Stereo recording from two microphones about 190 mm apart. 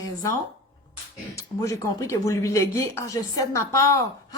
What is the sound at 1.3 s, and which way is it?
Speech, 15° left (ahead or behind).